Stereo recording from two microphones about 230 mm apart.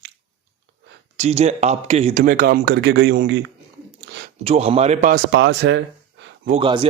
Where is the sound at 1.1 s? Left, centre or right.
Right.